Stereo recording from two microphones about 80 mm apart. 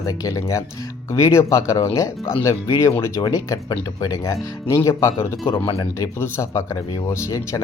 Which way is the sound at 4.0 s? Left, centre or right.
Left.